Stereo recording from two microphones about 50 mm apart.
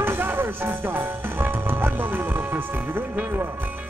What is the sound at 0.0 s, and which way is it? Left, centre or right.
Speech, right.